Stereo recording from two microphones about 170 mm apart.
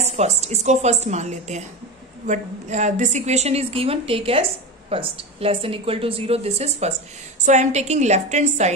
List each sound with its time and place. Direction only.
0.0 s a woman's voice: 40° right (ahead or behind)